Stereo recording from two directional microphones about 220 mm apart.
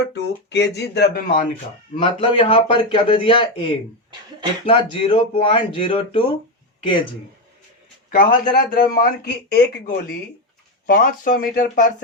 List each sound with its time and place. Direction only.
0.1 s speech: 50° left (ahead or behind)
2.0 s a man's voice: 25° left (ahead or behind)
8.1 s speech: 40° left (ahead or behind)